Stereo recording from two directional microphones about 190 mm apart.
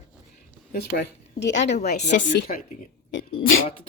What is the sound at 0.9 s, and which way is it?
Speech, 65° left (ahead or behind).